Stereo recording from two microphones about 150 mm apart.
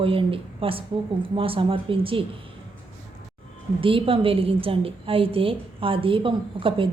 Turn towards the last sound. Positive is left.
turn(degrees=-35)  # may be behind; listen again after turning